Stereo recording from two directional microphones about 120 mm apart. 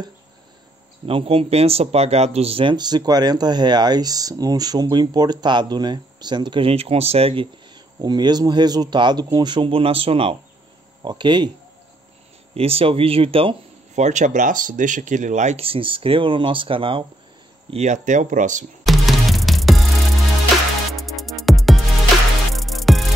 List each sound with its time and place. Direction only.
1.0 s speech: 50° right (ahead or behind)
7.7 s speech: 35° right (ahead or behind)
11.0 s speech: 40° right (ahead or behind)
12.5 s speech: 55° right (ahead or behind)
13.9 s speech: 85° right
15.6 s speech: 50° right (ahead or behind)
17.6 s speech: 70° right (ahead or behind); by 18.7 s 90° right
18.9 s music: centre (ahead or behind)
20.9 s music: centre (ahead or behind)